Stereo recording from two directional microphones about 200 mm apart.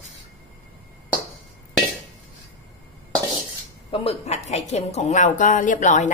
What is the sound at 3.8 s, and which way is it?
A woman's voice, 30° left (ahead or behind).